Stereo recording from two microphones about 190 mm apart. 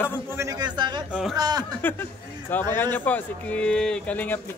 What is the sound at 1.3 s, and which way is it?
Chuckle, 20° right (ahead or behind).